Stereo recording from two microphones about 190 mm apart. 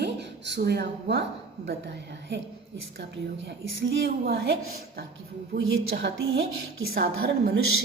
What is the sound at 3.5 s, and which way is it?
A woman's voice, 70° right (ahead or behind).